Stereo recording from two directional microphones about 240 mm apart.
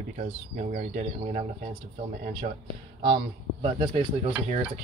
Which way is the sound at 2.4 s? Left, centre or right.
Right.